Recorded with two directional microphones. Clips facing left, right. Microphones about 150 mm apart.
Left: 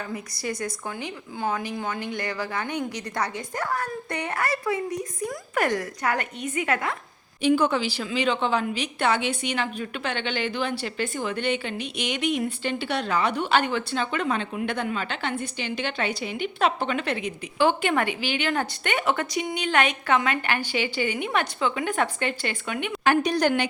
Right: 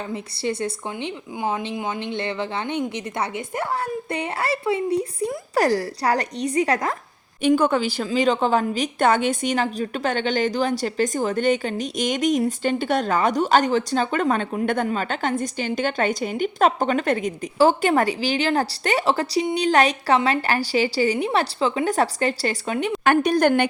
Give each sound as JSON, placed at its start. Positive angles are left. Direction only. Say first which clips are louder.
{"t": 0.1, "sound": "speech", "louder": "right 5 dB", "side_deg": -25}
{"t": 7.4, "sound": "a woman's voice", "louder": "right 3 dB", "side_deg": -50}
{"t": 23.0, "sound": "a woman's voice", "louder": "right 3 dB", "side_deg": -55}